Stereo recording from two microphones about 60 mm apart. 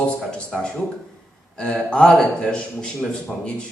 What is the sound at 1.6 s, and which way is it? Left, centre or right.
A man's voice, centre.